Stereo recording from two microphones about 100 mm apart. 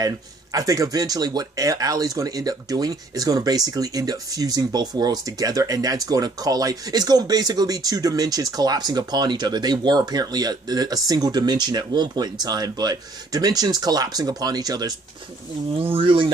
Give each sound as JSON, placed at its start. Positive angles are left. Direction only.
{"t": 0.0, "sound": "speech", "side_deg": -35}
{"t": 15.9, "sound": "speech", "side_deg": -60}